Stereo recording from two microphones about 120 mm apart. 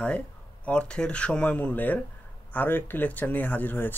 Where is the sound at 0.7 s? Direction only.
10° left (ahead or behind).